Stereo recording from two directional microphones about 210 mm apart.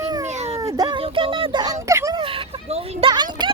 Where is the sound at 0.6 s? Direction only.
15° right (ahead or behind).